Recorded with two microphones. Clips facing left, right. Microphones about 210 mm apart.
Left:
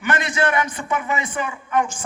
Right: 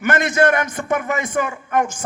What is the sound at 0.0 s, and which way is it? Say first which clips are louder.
A man's voice: right 5 dB; 45° right (ahead or behind).